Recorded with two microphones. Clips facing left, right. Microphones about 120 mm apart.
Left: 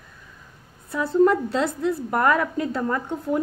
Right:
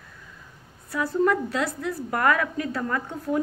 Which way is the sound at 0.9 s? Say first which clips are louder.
Left 4 dB; 25° left (ahead or behind).